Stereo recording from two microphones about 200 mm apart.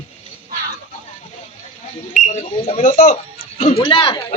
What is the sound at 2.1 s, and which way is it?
Speech, 35° left (ahead or behind).